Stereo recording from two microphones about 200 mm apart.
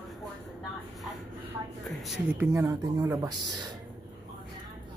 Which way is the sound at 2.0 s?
10° right (ahead or behind).